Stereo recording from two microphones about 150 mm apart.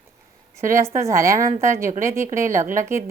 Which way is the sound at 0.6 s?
20° right (ahead or behind).